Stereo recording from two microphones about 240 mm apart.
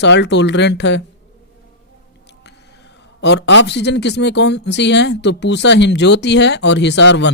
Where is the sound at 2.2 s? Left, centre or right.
Left.